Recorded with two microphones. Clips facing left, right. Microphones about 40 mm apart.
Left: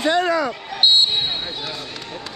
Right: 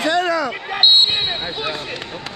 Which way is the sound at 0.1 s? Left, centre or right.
Right.